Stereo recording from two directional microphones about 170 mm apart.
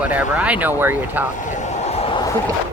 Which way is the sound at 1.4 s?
45° left (ahead or behind).